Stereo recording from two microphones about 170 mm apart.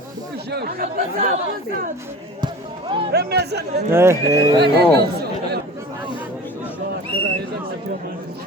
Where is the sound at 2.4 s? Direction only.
30° right (ahead or behind).